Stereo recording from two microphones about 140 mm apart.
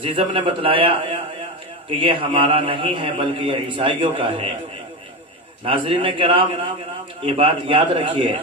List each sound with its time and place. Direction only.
0.0 s a man's voice: 40° right (ahead or behind)
5.6 s a man's voice: 40° right (ahead or behind)